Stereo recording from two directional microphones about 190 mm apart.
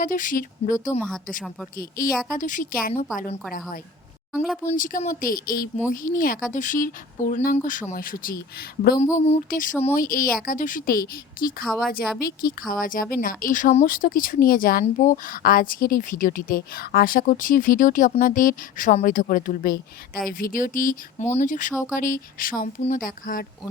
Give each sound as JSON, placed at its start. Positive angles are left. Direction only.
{"t": 0.0, "sound": "speech", "side_deg": 45}
{"t": 4.3, "sound": "speech", "side_deg": 0}
{"t": 4.7, "sound": "speech", "side_deg": 45}
{"t": 9.1, "sound": "speech", "side_deg": 35}
{"t": 9.5, "sound": "speech", "side_deg": 45}
{"t": 11.6, "sound": "speech", "side_deg": 5}
{"t": 12.2, "sound": "speech", "side_deg": 50}